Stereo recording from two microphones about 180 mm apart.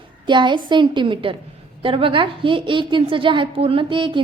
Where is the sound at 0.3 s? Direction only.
25° right (ahead or behind).